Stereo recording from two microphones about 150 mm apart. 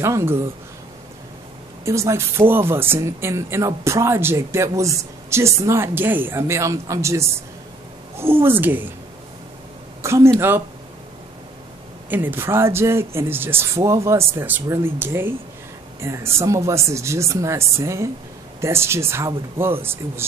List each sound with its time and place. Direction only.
0.0 s speech: 20° right (ahead or behind)
1.9 s speech: 20° right (ahead or behind)
10.0 s speech: 20° right (ahead or behind)
12.1 s speech: 10° right (ahead or behind)